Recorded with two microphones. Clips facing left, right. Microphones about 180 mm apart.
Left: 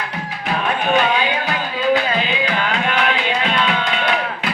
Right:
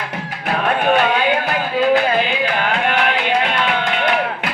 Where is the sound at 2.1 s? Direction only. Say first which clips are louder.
Right 2 dB; 55° right (ahead or behind).